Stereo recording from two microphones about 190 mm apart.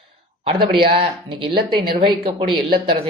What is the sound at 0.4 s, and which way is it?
Speech, 30° right (ahead or behind).